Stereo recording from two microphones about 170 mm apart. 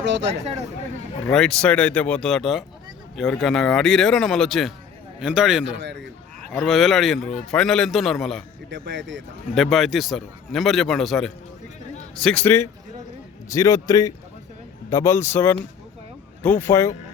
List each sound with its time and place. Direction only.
0.0 s speech: 90° right
1.3 s a man's voice: 5° left (ahead or behind)
5.6 s speech: 90° right
6.5 s a man's voice: centre (ahead or behind)
8.7 s speech: 90° right
9.6 s a man's voice: centre (ahead or behind); by 16.9 s 15° left (ahead or behind)